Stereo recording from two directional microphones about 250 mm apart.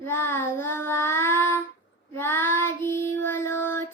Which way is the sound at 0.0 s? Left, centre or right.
Centre.